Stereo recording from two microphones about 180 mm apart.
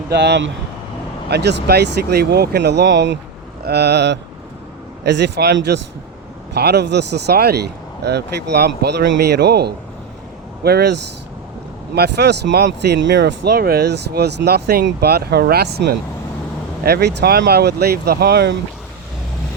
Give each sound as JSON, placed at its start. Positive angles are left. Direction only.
{"t": 0.1, "sound": "speech", "side_deg": -70}
{"t": 3.6, "sound": "speech", "side_deg": -65}